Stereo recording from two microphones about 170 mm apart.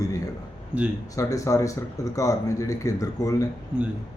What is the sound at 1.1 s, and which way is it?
Speech, 20° left (ahead or behind).